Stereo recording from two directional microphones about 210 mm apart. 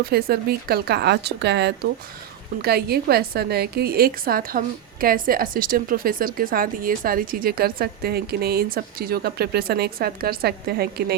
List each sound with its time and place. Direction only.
0.0 s a woman's voice: 45° right (ahead or behind)